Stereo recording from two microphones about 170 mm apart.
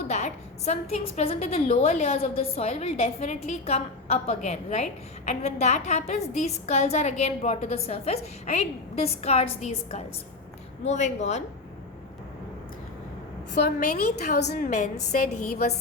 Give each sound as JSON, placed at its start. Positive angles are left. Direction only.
{"t": 0.1, "sound": "a woman's voice", "side_deg": 40}
{"t": 13.6, "sound": "a woman's voice", "side_deg": 65}